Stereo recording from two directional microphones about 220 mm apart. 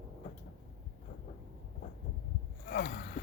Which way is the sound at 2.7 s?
50° left (ahead or behind).